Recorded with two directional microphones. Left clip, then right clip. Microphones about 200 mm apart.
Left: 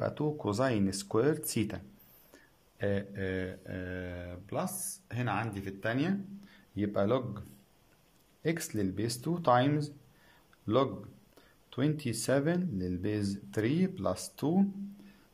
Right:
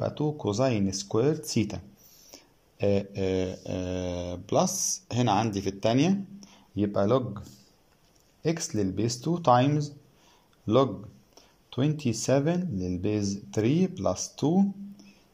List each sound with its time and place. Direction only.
0.0 s speech: 5° left (ahead or behind)
2.3 s mantra: 5° right (ahead or behind); by 4.7 s 20° right (ahead or behind)
5.0 s speech: 25° right (ahead or behind)
6.7 s speech: centre (ahead or behind)
11.3 s speech: centre (ahead or behind)